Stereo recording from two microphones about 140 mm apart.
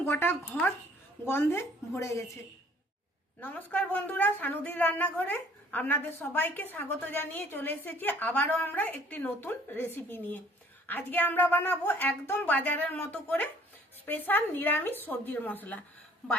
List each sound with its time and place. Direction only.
0.0 s a woman's voice: 15° left (ahead or behind)
3.4 s a woman's voice: 10° left (ahead or behind)